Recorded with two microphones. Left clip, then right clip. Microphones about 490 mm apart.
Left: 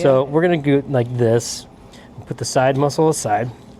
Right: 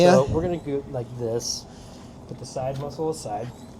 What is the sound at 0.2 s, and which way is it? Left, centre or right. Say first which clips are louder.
Speech: left 6 dB; left.